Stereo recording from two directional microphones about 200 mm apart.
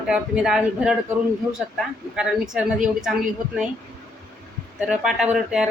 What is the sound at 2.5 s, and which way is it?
Speech, 5° right (ahead or behind).